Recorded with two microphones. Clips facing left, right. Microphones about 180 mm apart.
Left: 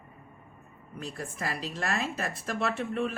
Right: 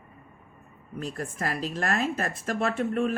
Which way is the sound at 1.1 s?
45° right (ahead or behind).